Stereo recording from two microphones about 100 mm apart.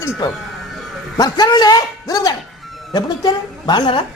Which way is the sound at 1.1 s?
40° left (ahead or behind).